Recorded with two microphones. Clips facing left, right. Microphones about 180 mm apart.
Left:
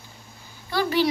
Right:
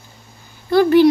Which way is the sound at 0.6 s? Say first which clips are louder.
Right 11 dB; 50° right (ahead or behind).